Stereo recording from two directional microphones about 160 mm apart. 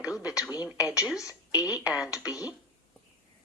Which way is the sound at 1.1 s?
20° left (ahead or behind).